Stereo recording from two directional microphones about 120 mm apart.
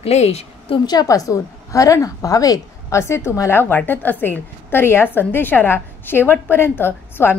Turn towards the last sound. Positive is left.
turn(degrees=20)  # may be behind; listen again after turning